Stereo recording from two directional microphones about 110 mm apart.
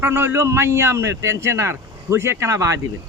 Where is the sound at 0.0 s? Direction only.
20° right (ahead or behind).